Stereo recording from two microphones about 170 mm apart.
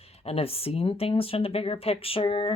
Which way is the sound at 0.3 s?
35° left (ahead or behind).